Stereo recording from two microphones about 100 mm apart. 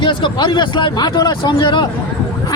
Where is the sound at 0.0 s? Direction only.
55° left (ahead or behind).